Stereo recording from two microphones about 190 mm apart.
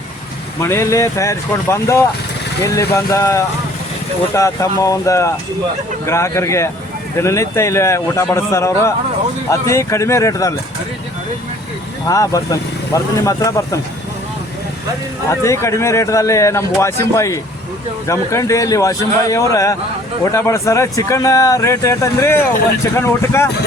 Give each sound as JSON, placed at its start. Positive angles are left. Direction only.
{"t": 0.6, "sound": "a man's voice", "side_deg": 15}
{"t": 12.0, "sound": "a man's voice", "side_deg": 15}
{"t": 15.3, "sound": "a man's voice", "side_deg": 15}